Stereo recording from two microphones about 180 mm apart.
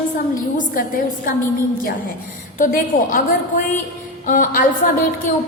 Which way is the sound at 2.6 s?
50° left (ahead or behind).